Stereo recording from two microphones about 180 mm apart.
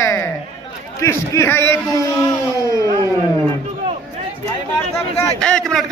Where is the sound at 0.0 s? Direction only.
15° left (ahead or behind).